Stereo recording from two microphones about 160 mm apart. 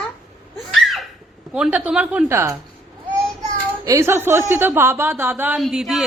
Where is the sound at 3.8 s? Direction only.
20° right (ahead or behind); by 6.0 s 5° right (ahead or behind).